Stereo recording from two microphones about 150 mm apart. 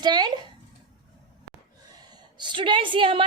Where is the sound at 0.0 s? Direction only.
30° right (ahead or behind).